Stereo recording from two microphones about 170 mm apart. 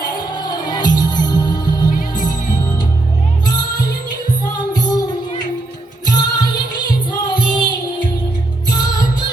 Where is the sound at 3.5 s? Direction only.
25° left (ahead or behind).